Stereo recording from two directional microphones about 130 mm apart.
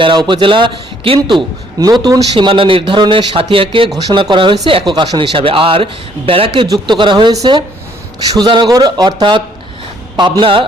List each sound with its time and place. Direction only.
0.0 s a man's voice: 40° right (ahead or behind)
10.2 s a man's voice: 35° right (ahead or behind)